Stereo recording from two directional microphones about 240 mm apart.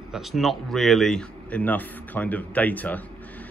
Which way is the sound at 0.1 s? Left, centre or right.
Centre.